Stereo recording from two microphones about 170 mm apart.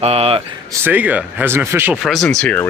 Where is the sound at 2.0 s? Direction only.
Centre (ahead or behind).